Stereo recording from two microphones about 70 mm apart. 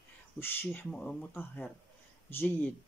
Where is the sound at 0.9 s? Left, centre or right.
Centre.